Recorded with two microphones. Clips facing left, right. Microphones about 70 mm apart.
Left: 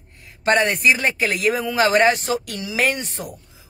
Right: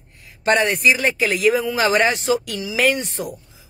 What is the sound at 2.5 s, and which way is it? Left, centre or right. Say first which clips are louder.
Speech: right 1 dB; left.